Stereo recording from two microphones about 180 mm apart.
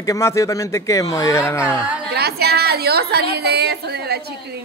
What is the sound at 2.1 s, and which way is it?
A woman's voice, 60° right (ahead or behind).